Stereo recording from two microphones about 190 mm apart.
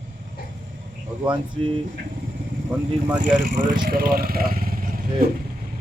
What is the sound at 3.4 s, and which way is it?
Speech, 45° right (ahead or behind).